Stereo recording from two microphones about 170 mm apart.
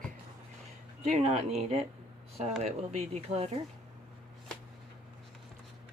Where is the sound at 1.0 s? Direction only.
40° right (ahead or behind).